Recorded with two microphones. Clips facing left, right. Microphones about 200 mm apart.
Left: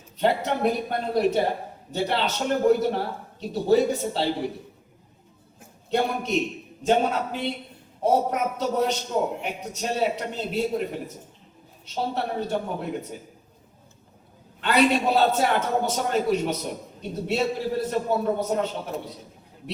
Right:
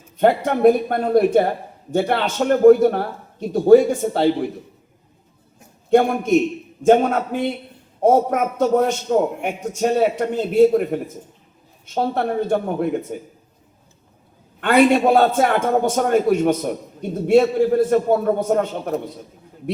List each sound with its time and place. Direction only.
0.2 s a man's voice: 50° right (ahead or behind)
5.9 s a man's voice: 50° right (ahead or behind)
14.6 s a man's voice: 50° right (ahead or behind)